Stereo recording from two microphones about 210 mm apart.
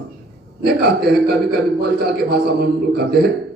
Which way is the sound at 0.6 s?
50° right (ahead or behind).